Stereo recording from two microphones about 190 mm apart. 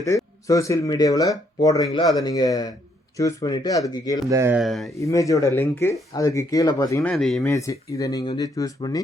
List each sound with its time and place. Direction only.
0.4 s speech: 15° left (ahead or behind)
4.3 s speech: 15° right (ahead or behind)
4.6 s speech: centre (ahead or behind)
4.9 s speech: 15° left (ahead or behind)
7.1 s speech: 5° left (ahead or behind)
7.5 s speech: 15° left (ahead or behind)